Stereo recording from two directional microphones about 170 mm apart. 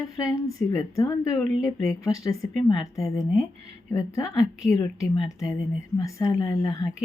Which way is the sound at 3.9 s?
20° left (ahead or behind).